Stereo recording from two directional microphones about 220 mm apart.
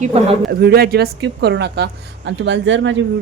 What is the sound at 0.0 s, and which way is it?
Speech, 25° right (ahead or behind).